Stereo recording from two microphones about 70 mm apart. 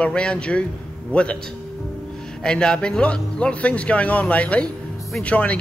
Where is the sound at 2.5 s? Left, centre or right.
Centre.